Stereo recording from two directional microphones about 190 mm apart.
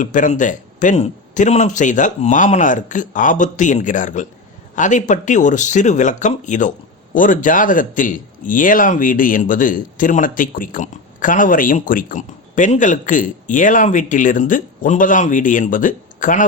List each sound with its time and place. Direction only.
0.0 s a man's voice: 40° left (ahead or behind)